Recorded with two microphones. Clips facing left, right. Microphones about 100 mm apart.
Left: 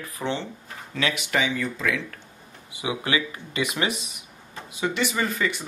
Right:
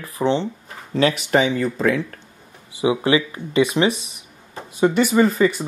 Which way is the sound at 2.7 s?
30° right (ahead or behind).